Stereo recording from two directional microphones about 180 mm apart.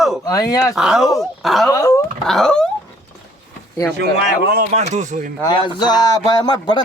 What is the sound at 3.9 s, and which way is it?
Speech, 70° right (ahead or behind).